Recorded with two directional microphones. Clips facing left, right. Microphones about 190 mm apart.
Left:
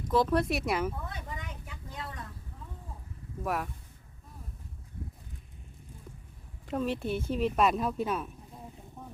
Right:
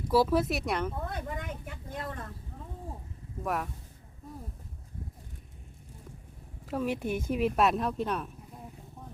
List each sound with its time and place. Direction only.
0.1 s speech: 5° right (ahead or behind)
1.1 s a sound: 55° right (ahead or behind)
3.4 s speech: centre (ahead or behind)
6.7 s speech: 10° right (ahead or behind)